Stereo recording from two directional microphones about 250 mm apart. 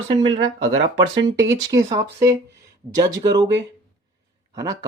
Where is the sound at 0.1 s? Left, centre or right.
Centre.